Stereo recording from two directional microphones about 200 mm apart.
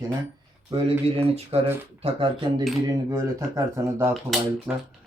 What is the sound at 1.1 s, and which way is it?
Speech, 30° right (ahead or behind).